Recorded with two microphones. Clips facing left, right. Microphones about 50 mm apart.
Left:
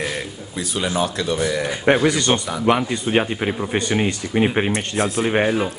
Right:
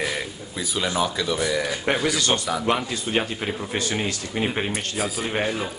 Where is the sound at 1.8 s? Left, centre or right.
Centre.